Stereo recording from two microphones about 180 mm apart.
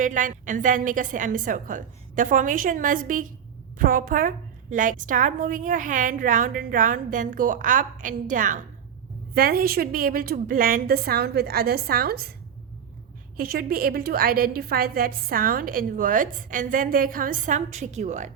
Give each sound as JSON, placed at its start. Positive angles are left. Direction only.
{"t": 0.0, "sound": "a woman's voice", "side_deg": -45}
{"t": 13.3, "sound": "a woman's voice", "side_deg": -55}